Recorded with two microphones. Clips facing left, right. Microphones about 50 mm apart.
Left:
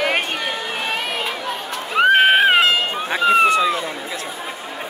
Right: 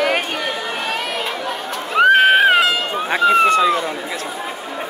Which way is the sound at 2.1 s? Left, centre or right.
Centre.